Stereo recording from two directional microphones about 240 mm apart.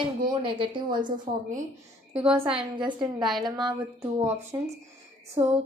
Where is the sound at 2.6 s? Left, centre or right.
Centre.